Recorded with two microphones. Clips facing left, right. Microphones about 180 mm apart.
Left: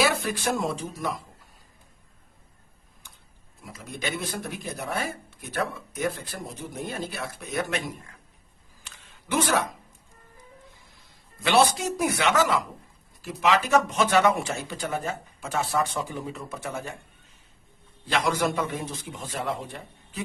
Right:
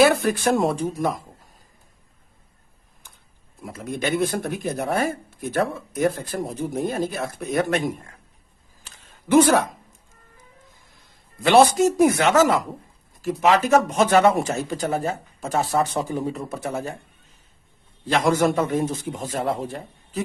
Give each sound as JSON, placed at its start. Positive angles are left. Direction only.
{"t": 0.0, "sound": "speech", "side_deg": -50}
{"t": 3.6, "sound": "speech", "side_deg": -55}
{"t": 8.8, "sound": "a sound", "side_deg": -40}
{"t": 11.4, "sound": "speech", "side_deg": -45}
{"t": 18.0, "sound": "speech", "side_deg": -45}